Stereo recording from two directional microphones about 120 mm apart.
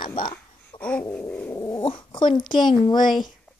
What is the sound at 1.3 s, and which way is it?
Cat, 10° left (ahead or behind).